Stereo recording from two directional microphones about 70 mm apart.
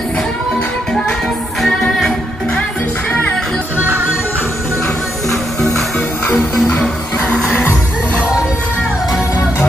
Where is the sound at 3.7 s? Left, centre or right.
Right.